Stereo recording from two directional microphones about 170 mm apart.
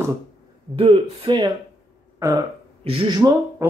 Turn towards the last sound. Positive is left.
turn(degrees=-30)  # may be behind; listen again after turning